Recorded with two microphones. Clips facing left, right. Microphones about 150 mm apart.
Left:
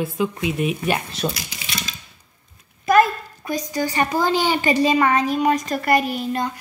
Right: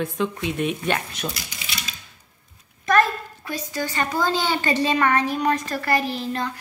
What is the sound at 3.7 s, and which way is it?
A woman's voice, 15° left (ahead or behind).